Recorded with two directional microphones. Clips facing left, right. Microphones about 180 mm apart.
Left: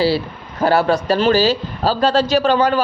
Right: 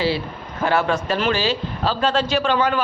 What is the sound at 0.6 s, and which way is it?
A man's voice, 35° left (ahead or behind).